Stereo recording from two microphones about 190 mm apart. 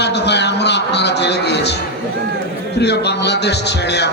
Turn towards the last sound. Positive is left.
turn(degrees=60)  # may be behind; listen again after turning